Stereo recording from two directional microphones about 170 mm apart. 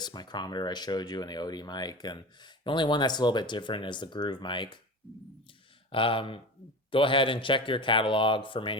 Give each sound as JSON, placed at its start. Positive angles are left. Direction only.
{"t": 0.0, "sound": "speech", "side_deg": 25}
{"t": 5.9, "sound": "speech", "side_deg": 30}